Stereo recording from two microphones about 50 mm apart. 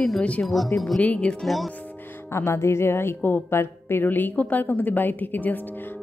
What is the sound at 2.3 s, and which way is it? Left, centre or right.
A woman's voice, left.